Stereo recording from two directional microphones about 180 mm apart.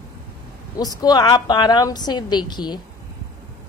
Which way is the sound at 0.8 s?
20° left (ahead or behind).